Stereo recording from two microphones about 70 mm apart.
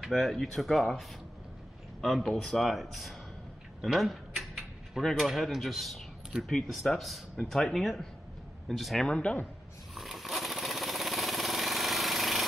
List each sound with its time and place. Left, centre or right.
0.1 s a man's voice: centre
9.0 s speech: centre
9.9 s a sound: centre